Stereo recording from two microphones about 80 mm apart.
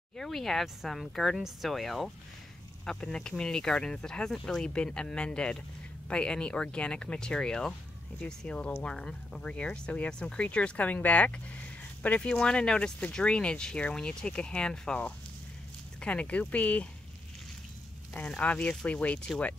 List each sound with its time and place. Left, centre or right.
0.2 s speech: centre
18.1 s speech: centre